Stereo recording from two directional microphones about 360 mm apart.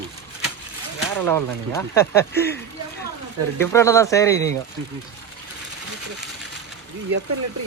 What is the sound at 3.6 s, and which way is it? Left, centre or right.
Speech, centre.